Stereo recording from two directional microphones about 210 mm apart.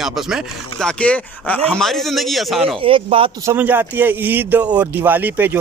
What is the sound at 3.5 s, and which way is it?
Speech, 10° right (ahead or behind).